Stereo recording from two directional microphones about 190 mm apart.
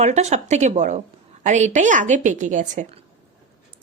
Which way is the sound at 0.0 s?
35° right (ahead or behind).